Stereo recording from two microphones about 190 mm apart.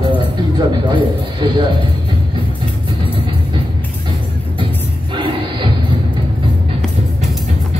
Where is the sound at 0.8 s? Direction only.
25° right (ahead or behind).